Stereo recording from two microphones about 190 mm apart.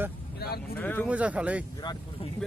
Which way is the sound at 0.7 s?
10° left (ahead or behind).